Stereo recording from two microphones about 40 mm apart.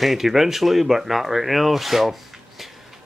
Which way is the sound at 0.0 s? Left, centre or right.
Centre.